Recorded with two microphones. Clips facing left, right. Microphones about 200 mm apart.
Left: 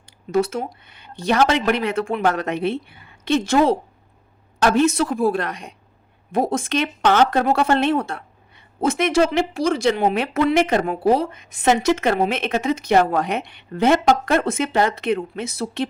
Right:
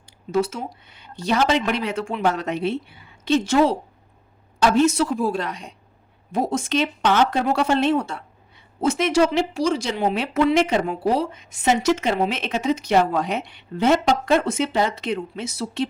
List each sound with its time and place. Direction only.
0.0 s a woman's voice: 55° left (ahead or behind)
4.9 s speech: 55° left (ahead or behind)